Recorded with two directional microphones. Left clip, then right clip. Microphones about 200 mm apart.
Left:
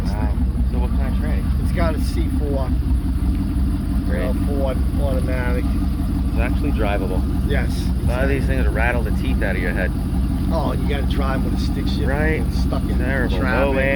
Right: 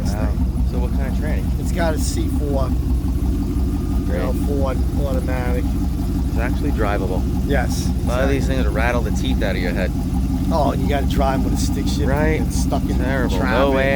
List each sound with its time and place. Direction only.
8.1 s speech: 10° right (ahead or behind)
10.5 s speech: 60° right (ahead or behind)
12.0 s speech: 5° right (ahead or behind)
13.4 s speech: 60° right (ahead or behind)
13.7 s speech: 20° right (ahead or behind)